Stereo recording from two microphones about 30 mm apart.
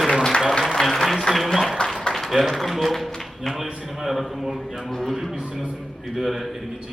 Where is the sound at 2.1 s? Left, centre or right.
Centre.